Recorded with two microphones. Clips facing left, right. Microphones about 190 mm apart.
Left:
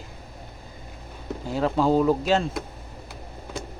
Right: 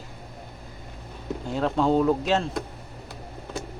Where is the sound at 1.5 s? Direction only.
5° left (ahead or behind).